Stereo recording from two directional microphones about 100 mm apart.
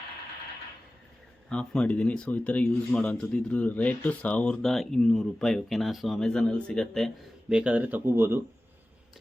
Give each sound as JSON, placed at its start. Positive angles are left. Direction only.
{"t": 1.5, "sound": "speech", "side_deg": 10}
{"t": 7.5, "sound": "speech", "side_deg": -10}